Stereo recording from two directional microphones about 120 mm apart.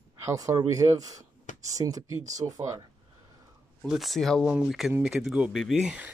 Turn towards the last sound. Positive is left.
turn(degrees=-10)  # may be behind; listen again after turning